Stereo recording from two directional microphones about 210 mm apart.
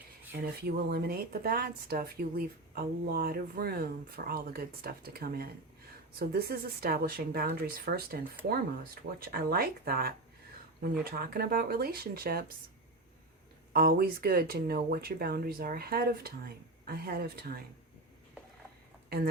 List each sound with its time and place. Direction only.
0.3 s speech: 45° right (ahead or behind)
9.3 s speech: 45° right (ahead or behind)
13.7 s speech: 45° right (ahead or behind)